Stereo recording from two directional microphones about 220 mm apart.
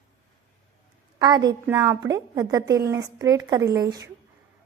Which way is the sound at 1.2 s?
20° right (ahead or behind).